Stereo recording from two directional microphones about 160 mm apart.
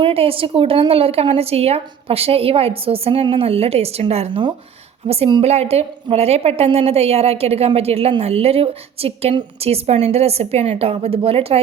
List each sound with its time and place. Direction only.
0.0 s a woman's voice: 35° right (ahead or behind)